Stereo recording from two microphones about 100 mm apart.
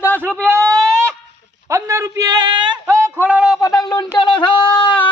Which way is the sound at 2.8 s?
30° right (ahead or behind).